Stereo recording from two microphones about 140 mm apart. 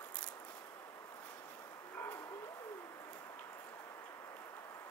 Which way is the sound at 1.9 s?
15° left (ahead or behind).